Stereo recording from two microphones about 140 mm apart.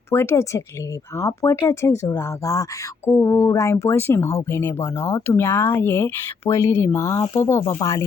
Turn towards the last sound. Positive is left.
turn(degrees=20)  # may be behind; listen again after turning